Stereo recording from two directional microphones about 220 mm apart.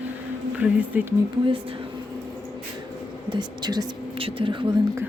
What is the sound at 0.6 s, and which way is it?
Speech, 5° right (ahead or behind).